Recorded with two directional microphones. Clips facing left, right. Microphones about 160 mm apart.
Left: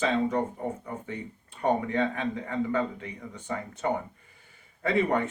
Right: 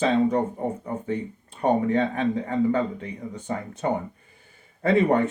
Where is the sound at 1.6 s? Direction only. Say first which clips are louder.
Right 4 dB; 35° right (ahead or behind).